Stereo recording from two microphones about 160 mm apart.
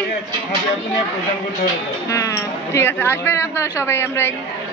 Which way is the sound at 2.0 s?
20° left (ahead or behind).